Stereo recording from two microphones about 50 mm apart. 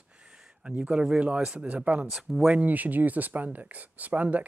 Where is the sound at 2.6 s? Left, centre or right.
Right.